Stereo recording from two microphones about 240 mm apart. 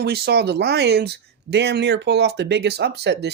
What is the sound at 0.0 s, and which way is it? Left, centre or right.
Speech, right.